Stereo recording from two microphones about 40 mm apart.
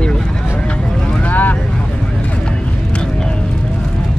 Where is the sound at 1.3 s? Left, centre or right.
Left.